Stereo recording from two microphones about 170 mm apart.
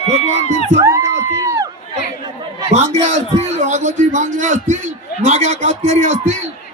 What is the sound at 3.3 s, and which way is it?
A man's voice, 45° right (ahead or behind).